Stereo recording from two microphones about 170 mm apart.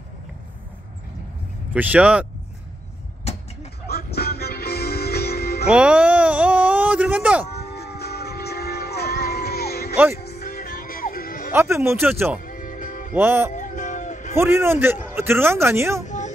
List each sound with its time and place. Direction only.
1.7 s speech: 10° right (ahead or behind)
3.3 s vehicle: 35° left (ahead or behind)
3.8 s music: 70° left (ahead or behind)
5.7 s speech: 5° right (ahead or behind)
7.5 s music: 70° left (ahead or behind)
11.5 s speech: 15° right (ahead or behind)
12.4 s music: 55° left (ahead or behind)
13.1 s speech: 15° right (ahead or behind)
13.5 s music: 45° left (ahead or behind)
14.3 s speech: 15° right (ahead or behind)